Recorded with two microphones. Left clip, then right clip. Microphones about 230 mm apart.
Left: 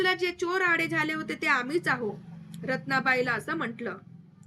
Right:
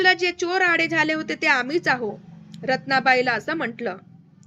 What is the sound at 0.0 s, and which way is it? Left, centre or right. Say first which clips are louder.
A woman's voice: right 8 dB; centre.